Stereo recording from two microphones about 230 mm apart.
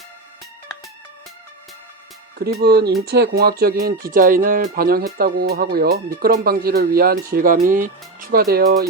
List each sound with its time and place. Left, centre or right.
2.4 s speech: right